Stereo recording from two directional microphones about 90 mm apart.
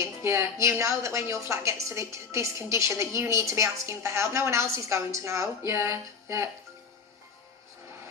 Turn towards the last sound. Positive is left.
turn(degrees=-30)  # may be behind; listen again after turning